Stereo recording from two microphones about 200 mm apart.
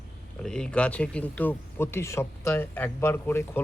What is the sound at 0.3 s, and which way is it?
Speech, 5° left (ahead or behind).